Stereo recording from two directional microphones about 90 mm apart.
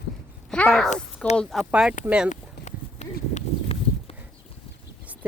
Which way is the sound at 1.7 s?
10° right (ahead or behind).